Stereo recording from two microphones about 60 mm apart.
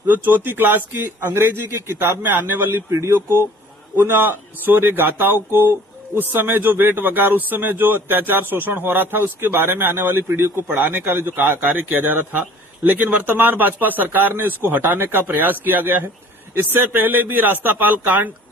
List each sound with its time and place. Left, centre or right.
0.1 s speech: right